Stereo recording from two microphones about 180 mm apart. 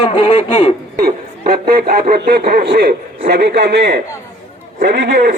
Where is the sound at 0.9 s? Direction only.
55° right (ahead or behind); by 4.0 s 70° right (ahead or behind).